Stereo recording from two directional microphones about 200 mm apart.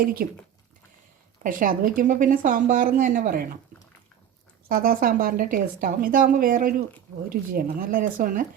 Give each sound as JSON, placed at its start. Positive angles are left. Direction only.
{"t": 0.0, "sound": "speech", "side_deg": -45}
{"t": 1.5, "sound": "speech", "side_deg": -45}
{"t": 4.7, "sound": "speech", "side_deg": -45}